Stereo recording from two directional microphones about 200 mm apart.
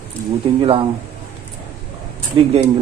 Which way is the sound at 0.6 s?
25° right (ahead or behind).